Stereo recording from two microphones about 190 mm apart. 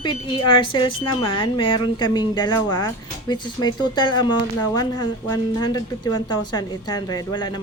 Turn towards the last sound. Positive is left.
turn(degrees=20)  # may be behind; listen again after turning